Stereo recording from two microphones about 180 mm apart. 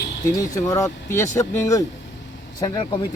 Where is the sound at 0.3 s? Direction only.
20° left (ahead or behind).